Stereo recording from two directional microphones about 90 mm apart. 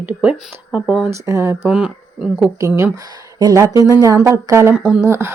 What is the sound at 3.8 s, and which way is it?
Speech, 40° left (ahead or behind).